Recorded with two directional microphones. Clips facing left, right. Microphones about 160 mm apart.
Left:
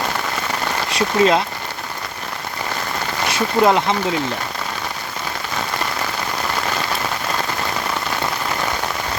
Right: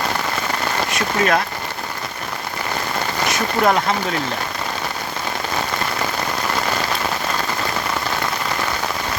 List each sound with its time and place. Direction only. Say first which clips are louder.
0.9 s speech: left 4 dB; 25° left (ahead or behind)
3.6 s speech: left 2 dB; 20° left (ahead or behind)